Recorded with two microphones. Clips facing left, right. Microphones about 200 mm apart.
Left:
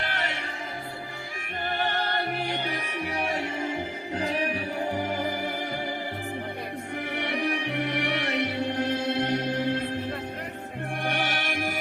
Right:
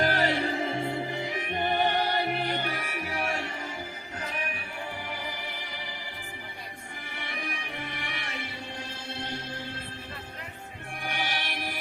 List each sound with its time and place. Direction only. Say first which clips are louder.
0.0 s music: right 7 dB; 35° right (ahead or behind)
1.6 s music: right 2 dB; 15° right (ahead or behind)
2.4 s music: left 1 dB; 15° left (ahead or behind)
4.2 s music: left 8 dB; 35° left (ahead or behind)
7.2 s music: left 9 dB; 65° left (ahead or behind)
11.0 s music: left 4 dB; 55° left (ahead or behind)